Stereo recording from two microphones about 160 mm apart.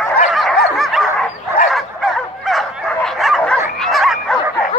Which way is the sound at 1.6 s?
Centre (ahead or behind).